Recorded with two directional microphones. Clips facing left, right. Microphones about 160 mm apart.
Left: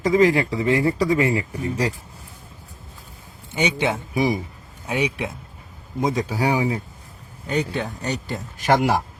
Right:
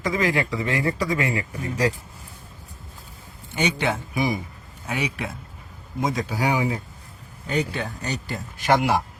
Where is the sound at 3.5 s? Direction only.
20° left (ahead or behind).